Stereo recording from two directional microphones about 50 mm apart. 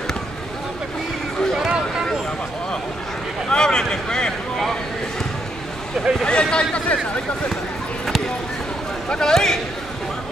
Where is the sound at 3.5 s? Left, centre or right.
Centre.